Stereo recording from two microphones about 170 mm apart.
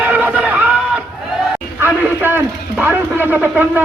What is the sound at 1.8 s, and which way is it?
A man's voice, 10° right (ahead or behind).